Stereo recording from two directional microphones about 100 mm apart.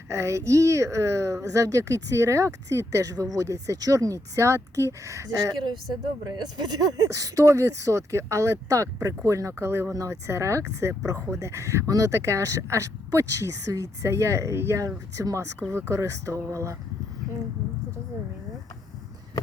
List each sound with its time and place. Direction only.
0.1 s a woman's voice: 30° right (ahead or behind)
5.6 s a woman's voice: 45° right (ahead or behind); by 16.7 s 30° right (ahead or behind)